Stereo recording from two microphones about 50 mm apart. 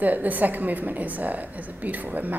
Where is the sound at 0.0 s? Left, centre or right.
Right.